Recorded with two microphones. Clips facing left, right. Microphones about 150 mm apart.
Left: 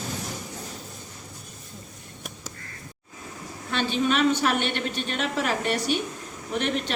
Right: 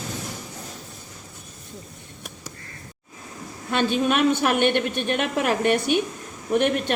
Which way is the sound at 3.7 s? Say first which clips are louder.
Right 3 dB; 50° right (ahead or behind).